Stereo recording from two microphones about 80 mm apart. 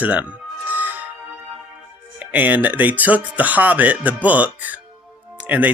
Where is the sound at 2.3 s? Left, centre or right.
Right.